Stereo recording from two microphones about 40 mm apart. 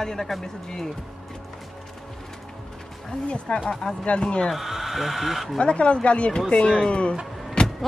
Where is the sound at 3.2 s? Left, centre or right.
Left.